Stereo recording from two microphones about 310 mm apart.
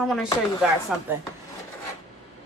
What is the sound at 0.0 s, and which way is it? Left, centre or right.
Chopping, centre.